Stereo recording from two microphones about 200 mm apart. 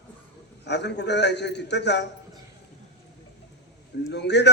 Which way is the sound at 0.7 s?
60° left (ahead or behind).